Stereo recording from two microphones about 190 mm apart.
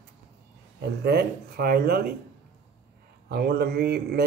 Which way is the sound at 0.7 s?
60° right (ahead or behind).